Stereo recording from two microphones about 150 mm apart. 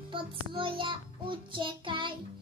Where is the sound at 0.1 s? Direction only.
35° right (ahead or behind).